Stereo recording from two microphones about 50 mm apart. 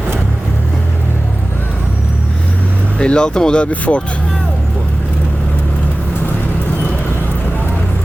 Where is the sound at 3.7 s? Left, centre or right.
Left.